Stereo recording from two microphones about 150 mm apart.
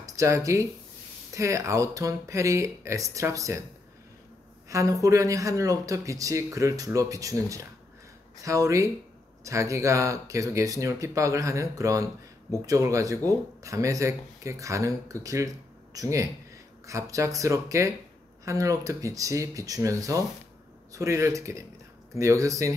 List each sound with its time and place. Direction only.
0.0 s speech: 20° right (ahead or behind)
4.6 s a woman's voice: 20° right (ahead or behind)